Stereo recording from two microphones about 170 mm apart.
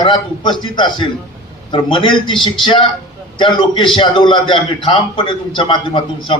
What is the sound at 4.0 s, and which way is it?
A man's voice, 30° left (ahead or behind).